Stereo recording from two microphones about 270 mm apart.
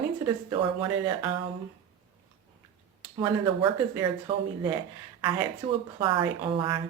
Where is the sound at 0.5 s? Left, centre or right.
Centre.